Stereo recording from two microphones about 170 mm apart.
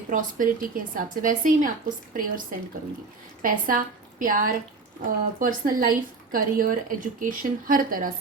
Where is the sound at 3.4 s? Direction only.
55° right (ahead or behind).